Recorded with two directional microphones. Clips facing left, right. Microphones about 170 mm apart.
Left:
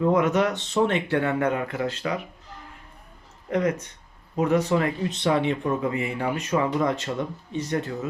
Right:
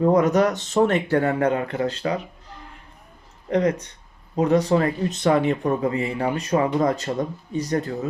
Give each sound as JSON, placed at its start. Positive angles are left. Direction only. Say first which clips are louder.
{"t": 0.0, "sound": "speech", "louder": "right 3 dB", "side_deg": -40}
{"t": 3.5, "sound": "speech", "louder": "right 3 dB", "side_deg": -35}